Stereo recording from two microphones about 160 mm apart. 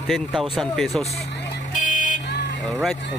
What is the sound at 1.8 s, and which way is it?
Vehicle, 55° left (ahead or behind).